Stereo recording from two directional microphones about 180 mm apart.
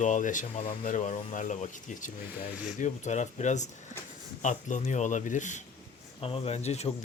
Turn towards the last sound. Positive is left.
turn(degrees=35)  # may be behind; listen again after turning